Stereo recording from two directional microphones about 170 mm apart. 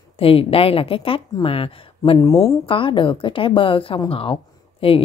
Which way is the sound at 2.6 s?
30° left (ahead or behind).